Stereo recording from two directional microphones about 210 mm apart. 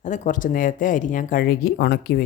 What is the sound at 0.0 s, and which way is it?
A woman's voice, 35° left (ahead or behind).